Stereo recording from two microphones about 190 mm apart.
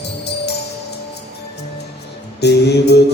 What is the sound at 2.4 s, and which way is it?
Music, 60° left (ahead or behind).